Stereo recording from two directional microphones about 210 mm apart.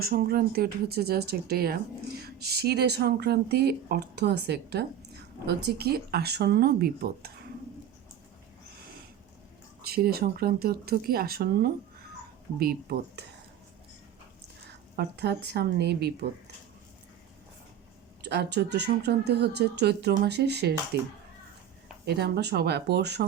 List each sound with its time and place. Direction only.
0.0 s speech: 45° right (ahead or behind)
9.8 s speech: 45° right (ahead or behind)
14.9 s speech: 50° right (ahead or behind)
18.2 s speech: 50° right (ahead or behind)